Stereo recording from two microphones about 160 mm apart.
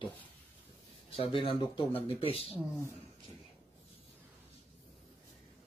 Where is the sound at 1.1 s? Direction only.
35° left (ahead or behind).